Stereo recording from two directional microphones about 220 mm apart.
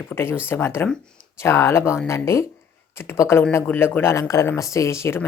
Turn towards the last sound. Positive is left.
turn(degrees=10)  # may be behind; listen again after turning